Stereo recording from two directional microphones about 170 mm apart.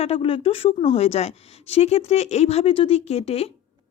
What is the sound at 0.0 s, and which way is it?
Speech, 35° left (ahead or behind).